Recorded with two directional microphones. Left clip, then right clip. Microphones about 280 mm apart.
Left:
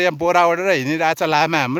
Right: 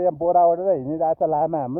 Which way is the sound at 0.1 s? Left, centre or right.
Left.